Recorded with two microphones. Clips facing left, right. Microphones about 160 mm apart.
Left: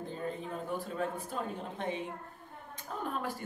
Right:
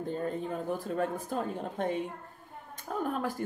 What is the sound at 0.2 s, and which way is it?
Speech, 45° right (ahead or behind).